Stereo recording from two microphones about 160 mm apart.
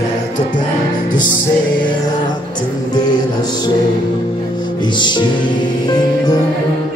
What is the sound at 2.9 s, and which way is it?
Music, 25° left (ahead or behind).